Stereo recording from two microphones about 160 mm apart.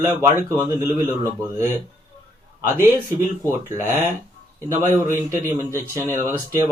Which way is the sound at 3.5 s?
15° right (ahead or behind).